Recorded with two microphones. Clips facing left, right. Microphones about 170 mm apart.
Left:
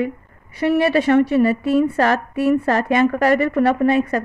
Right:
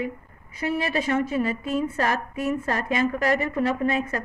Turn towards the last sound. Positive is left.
turn(degrees=70)  # may be behind; listen again after turning